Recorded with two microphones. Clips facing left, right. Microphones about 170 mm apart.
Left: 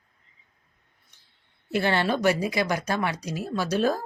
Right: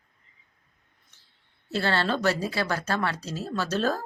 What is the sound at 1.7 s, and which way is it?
Speech, 15° left (ahead or behind).